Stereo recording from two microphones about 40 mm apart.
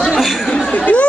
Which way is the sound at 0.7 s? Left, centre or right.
Left.